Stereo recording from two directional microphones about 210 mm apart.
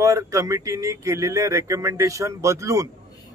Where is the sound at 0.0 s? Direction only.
15° right (ahead or behind).